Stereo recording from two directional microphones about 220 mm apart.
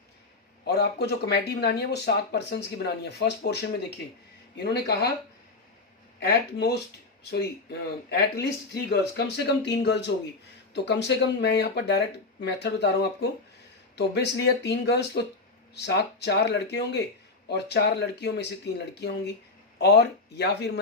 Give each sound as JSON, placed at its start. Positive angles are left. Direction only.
{"t": 0.6, "sound": "speech", "side_deg": 50}
{"t": 6.1, "sound": "speech", "side_deg": 50}
{"t": 8.1, "sound": "speech", "side_deg": 50}
{"t": 19.8, "sound": "speech", "side_deg": 50}